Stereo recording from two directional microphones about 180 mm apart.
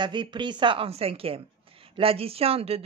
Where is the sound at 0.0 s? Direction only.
25° right (ahead or behind).